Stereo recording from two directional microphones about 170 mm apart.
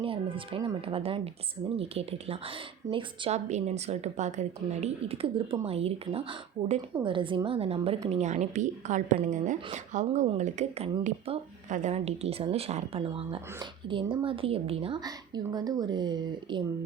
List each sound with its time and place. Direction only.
0.0 s a woman's voice: 30° right (ahead or behind)